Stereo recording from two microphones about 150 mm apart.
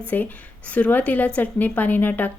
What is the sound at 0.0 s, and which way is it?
A woman's voice, 10° left (ahead or behind).